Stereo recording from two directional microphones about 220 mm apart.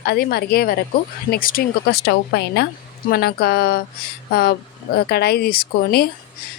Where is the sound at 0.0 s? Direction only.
45° left (ahead or behind).